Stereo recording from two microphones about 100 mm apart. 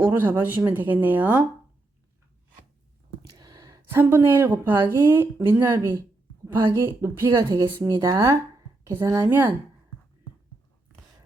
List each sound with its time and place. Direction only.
0.0 s speech: 20° right (ahead or behind)
3.3 s a woman's voice: 40° right (ahead or behind); by 9.5 s 25° right (ahead or behind)